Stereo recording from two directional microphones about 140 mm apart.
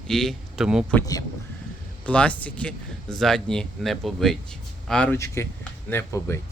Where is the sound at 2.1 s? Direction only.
10° left (ahead or behind).